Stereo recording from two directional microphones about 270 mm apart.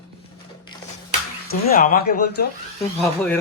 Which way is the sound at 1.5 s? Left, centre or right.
Left.